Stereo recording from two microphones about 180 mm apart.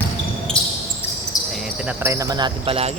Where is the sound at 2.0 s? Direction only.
20° right (ahead or behind).